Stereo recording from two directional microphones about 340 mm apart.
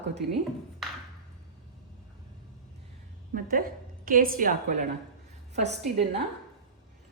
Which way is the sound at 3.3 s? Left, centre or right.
Right.